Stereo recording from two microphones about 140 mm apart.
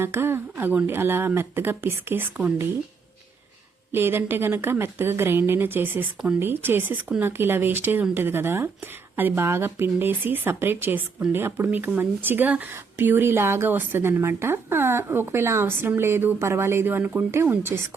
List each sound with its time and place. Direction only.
0.0 s speech: 15° right (ahead or behind)
3.9 s speech: 15° right (ahead or behind)